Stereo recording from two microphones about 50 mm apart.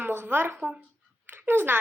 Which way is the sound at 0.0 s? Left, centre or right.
Right.